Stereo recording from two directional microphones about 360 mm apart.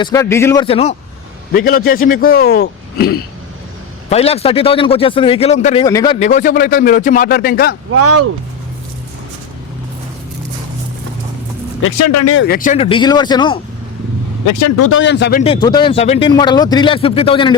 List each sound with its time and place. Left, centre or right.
0.0 s a man's voice: centre; by 3.2 s left
4.1 s a man's voice: centre
7.9 s speech: right
11.8 s speech: left; by 13.6 s centre
14.4 s speech: left
14.8 s a man's voice: left; by 17.5 s centre